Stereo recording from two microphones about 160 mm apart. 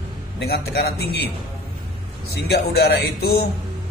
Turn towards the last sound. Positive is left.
turn(degrees=80)